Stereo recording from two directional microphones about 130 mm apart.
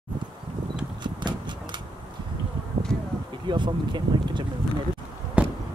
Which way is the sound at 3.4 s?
35° right (ahead or behind).